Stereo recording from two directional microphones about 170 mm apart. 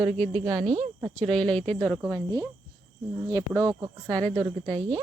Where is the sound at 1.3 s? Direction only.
5° left (ahead or behind).